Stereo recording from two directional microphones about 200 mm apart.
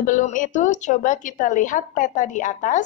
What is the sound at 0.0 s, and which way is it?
A woman's voice, 40° left (ahead or behind).